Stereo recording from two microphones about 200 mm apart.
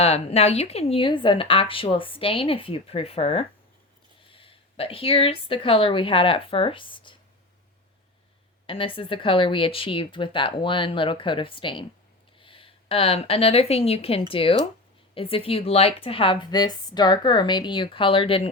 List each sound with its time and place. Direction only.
0.0 s speech: 30° left (ahead or behind)
8.6 s speech: 25° left (ahead or behind)